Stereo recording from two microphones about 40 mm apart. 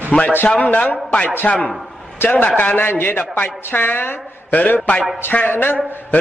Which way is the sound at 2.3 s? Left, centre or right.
Left.